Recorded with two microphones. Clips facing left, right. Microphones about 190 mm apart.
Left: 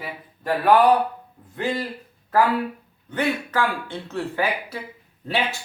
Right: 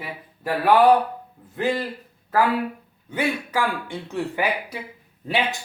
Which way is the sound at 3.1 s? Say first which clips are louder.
Left 1 dB; 10° right (ahead or behind).